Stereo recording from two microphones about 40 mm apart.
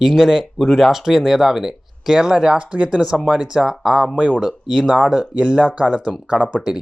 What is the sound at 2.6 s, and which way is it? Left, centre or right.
Speech, right.